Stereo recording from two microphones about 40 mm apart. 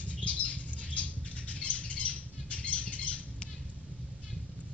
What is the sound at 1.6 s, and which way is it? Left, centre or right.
Squawk, left.